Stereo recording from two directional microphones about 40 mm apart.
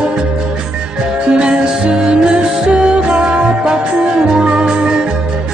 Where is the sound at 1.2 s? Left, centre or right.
Right.